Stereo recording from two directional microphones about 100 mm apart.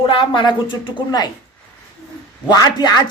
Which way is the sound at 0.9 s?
45° left (ahead or behind).